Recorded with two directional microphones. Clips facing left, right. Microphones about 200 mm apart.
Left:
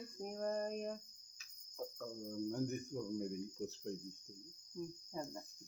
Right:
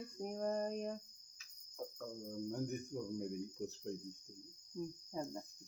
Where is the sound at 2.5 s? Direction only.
5° right (ahead or behind).